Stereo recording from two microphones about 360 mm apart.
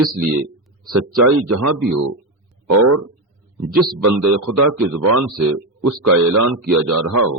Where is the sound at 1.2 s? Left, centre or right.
Right.